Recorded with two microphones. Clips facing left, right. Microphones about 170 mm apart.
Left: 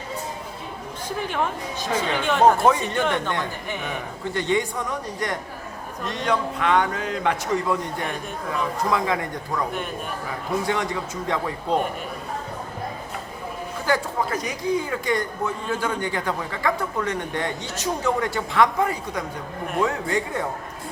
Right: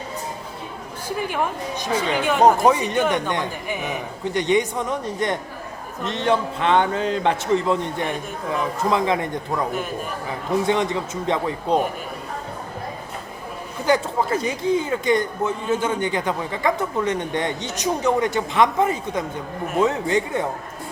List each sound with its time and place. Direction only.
1.0 s speech: 10° right (ahead or behind)
4.4 s a man's voice: 20° right (ahead or behind)
10.7 s a man's voice: 20° right (ahead or behind)
13.8 s a man's voice: 25° right (ahead or behind)